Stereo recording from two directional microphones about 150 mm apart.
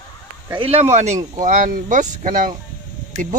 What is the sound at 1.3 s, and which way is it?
Speech, 60° right (ahead or behind).